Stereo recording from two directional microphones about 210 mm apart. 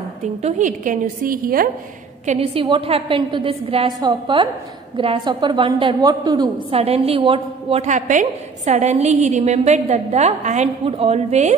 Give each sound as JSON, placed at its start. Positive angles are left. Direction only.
{"t": 0.2, "sound": "a woman's voice", "side_deg": -30}
{"t": 2.2, "sound": "a woman's voice", "side_deg": -25}